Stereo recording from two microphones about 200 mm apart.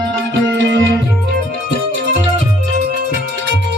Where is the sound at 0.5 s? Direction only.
60° right (ahead or behind).